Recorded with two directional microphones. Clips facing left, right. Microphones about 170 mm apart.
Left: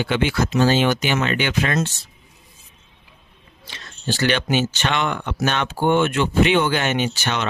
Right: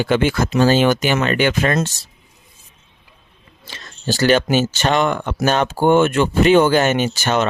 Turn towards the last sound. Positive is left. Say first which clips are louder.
# right 5 dB
turn(degrees=-45)  # may be behind; listen again after turning